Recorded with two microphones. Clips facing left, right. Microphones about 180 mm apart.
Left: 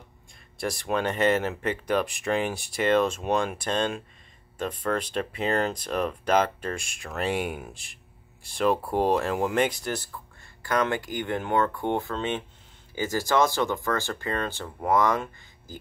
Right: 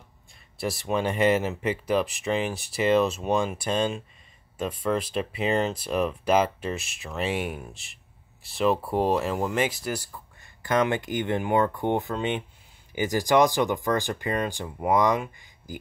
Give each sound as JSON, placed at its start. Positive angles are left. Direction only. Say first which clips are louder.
{"t": 0.6, "sound": "speech", "louder": "right 1 dB", "side_deg": -5}
{"t": 10.6, "sound": "speech", "louder": "right 2 dB", "side_deg": -20}